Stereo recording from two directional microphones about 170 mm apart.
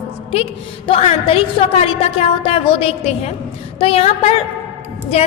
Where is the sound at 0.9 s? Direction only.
35° left (ahead or behind).